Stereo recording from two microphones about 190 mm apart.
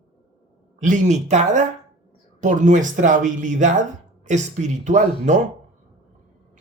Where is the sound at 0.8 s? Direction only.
40° right (ahead or behind).